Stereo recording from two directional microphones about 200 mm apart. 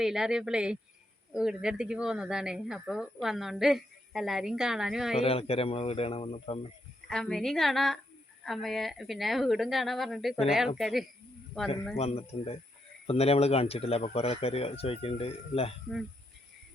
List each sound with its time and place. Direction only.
0.0 s a woman's voice: centre (ahead or behind)
5.2 s speech: 30° left (ahead or behind)
7.1 s a woman's voice: 5° left (ahead or behind)
11.9 s speech: 30° left (ahead or behind)